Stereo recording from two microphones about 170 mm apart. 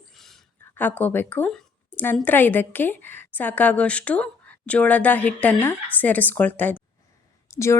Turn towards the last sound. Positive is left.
turn(degrees=15)  # may be behind; listen again after turning